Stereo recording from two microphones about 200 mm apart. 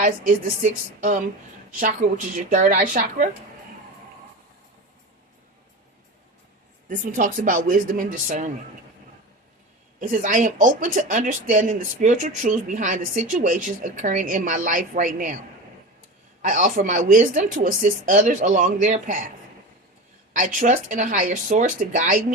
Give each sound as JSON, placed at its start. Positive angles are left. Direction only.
{"t": 0.0, "sound": "speech", "side_deg": -40}
{"t": 6.8, "sound": "speech", "side_deg": -40}
{"t": 10.0, "sound": "speech", "side_deg": -40}
{"t": 16.4, "sound": "speech", "side_deg": -40}
{"t": 20.3, "sound": "speech", "side_deg": -40}